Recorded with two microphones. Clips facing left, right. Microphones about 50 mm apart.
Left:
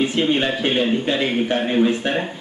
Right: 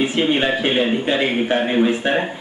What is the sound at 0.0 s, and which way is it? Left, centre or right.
Speech, centre.